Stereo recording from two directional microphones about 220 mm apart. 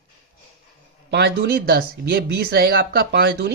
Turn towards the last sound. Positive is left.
turn(degrees=-50)  # may be behind; listen again after turning